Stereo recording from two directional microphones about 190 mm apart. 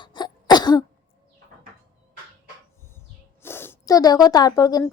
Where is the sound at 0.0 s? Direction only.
25° left (ahead or behind).